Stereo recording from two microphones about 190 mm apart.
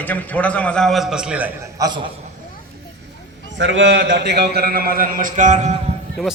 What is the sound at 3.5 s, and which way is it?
A man's voice, 70° right (ahead or behind).